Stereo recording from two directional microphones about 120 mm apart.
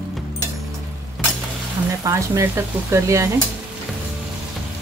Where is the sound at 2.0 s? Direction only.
25° right (ahead or behind).